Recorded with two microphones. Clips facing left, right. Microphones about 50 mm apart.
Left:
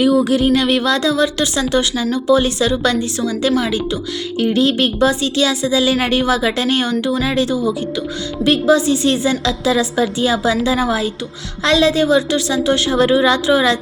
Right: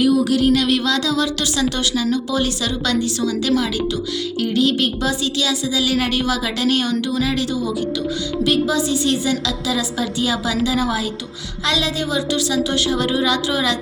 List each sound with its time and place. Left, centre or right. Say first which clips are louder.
0.0 s a woman's voice: left 2 dB; left